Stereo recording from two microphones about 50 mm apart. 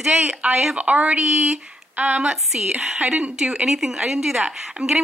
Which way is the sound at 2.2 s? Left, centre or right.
Centre.